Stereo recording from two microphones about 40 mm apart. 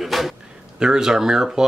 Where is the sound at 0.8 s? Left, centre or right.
Centre.